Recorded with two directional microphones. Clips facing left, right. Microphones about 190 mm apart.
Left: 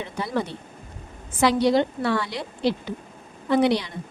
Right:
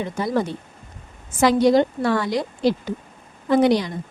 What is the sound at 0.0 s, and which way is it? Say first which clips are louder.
A woman's voice: right 5 dB; 45° right (ahead or behind).